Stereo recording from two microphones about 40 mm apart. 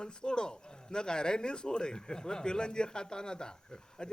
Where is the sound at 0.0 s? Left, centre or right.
Left.